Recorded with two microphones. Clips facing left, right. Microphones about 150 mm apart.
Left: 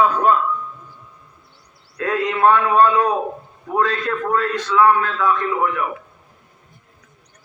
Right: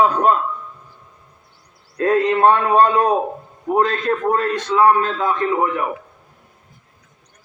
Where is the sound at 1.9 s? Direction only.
30° right (ahead or behind).